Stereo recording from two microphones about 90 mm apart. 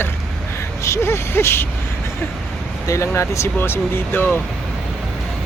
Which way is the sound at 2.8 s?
35° left (ahead or behind).